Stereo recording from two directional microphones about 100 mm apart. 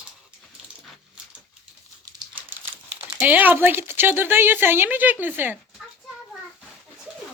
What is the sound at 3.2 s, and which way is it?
Speech, 15° right (ahead or behind).